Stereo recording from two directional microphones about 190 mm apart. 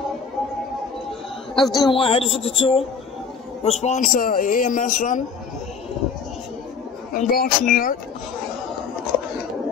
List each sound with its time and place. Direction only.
1.5 s a woman's voice: 20° left (ahead or behind); by 5.2 s 40° left (ahead or behind)
7.2 s a man's voice: 45° left (ahead or behind)